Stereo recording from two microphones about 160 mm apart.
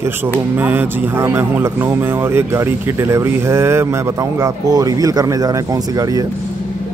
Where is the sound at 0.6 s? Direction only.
10° right (ahead or behind).